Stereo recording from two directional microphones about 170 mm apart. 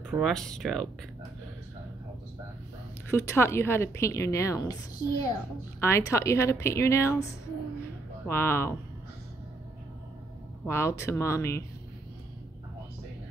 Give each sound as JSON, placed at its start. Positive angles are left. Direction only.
{"t": 0.1, "sound": "speech", "side_deg": 0}
{"t": 3.1, "sound": "a woman's voice", "side_deg": 15}
{"t": 8.3, "sound": "a woman's voice", "side_deg": 15}
{"t": 10.6, "sound": "a woman's voice", "side_deg": 15}